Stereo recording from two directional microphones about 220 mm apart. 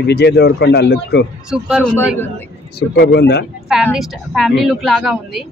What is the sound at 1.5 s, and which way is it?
Speech, centre (ahead or behind).